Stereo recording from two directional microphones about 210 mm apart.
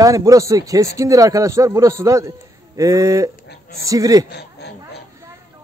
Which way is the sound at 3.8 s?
15° right (ahead or behind).